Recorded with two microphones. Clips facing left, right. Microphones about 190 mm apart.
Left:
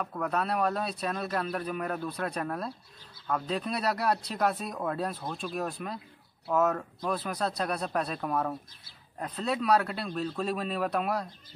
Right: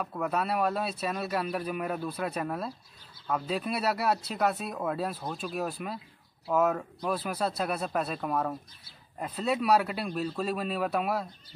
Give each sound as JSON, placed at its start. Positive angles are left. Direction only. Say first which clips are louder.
{"t": 0.0, "sound": "speech", "louder": "even", "side_deg": -5}